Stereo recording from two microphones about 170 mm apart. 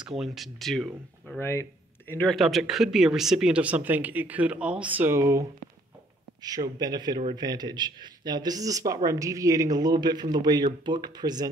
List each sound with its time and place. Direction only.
0.0 s speech: centre (ahead or behind)
1.4 s speech: 15° left (ahead or behind)
2.3 s speech: centre (ahead or behind); by 5.4 s 15° right (ahead or behind)
6.4 s a man's voice: 20° right (ahead or behind)